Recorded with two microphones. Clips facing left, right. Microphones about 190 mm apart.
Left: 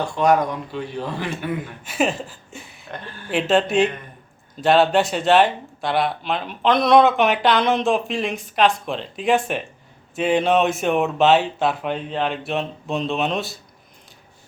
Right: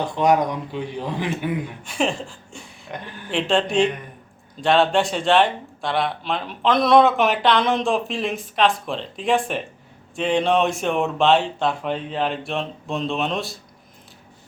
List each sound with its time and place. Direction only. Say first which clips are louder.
0.0 s speech: even; 20° right (ahead or behind)
1.8 s speech: left 4 dB; 5° left (ahead or behind)
2.9 s speech: right 1 dB; 15° right (ahead or behind)
3.2 s speech: left 2 dB; 5° left (ahead or behind)